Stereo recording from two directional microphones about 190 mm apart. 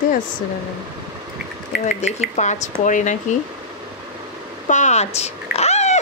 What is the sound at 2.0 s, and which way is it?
Speech, 40° left (ahead or behind).